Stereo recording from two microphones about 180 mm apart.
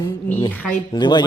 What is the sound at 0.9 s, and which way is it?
Speech, 25° left (ahead or behind).